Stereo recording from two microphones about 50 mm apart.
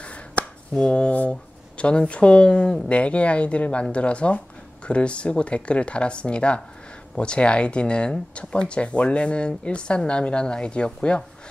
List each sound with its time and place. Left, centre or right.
0.0 s finger snapping: left
0.8 s speech: left